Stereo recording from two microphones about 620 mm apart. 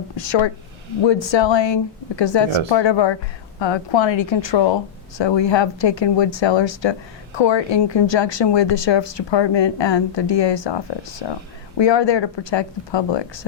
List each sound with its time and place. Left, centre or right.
0.2 s a woman's voice: left